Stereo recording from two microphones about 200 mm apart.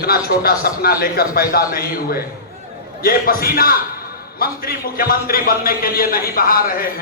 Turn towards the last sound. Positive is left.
turn(degrees=45)  # may be behind; listen again after turning